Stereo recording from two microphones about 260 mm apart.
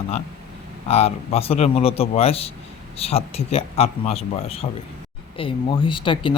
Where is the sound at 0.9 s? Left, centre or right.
Left.